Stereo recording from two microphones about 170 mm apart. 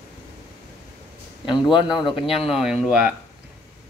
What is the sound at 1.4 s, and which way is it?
Speech, 30° left (ahead or behind).